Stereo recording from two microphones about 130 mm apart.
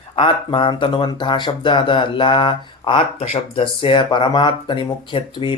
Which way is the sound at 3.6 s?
40° left (ahead or behind).